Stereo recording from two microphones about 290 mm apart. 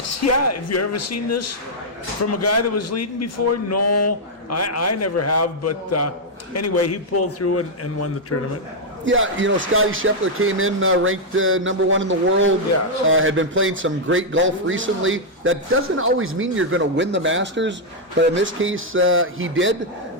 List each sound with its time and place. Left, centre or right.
0.1 s a man's voice: left
9.0 s a man's voice: right